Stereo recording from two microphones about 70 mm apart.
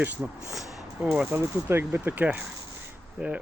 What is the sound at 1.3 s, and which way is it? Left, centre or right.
Speech, right.